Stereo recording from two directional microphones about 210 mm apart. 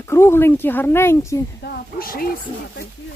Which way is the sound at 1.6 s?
45° left (ahead or behind).